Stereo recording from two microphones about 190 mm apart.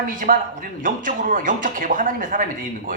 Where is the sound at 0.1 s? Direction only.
45° right (ahead or behind).